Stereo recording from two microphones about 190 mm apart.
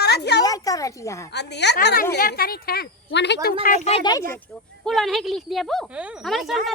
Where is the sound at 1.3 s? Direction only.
65° left (ahead or behind).